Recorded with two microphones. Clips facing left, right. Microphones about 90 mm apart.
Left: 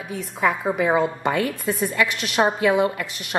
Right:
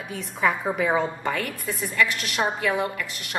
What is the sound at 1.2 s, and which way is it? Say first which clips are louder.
A woman's voice: left 5 dB; 20° left (ahead or behind).